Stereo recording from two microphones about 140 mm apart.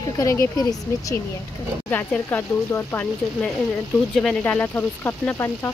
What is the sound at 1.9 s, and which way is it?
Speech, 15° left (ahead or behind).